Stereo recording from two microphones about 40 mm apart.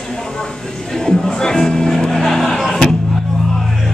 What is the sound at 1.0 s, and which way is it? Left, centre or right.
Music, centre.